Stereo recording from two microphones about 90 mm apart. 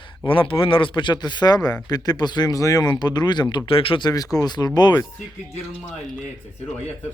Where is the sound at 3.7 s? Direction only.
90° left.